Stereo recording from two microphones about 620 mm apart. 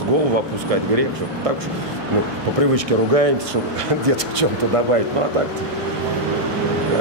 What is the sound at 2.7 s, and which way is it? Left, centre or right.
Speech, right.